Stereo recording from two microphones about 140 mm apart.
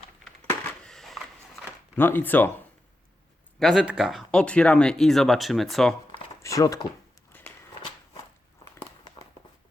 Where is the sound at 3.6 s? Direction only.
5° right (ahead or behind).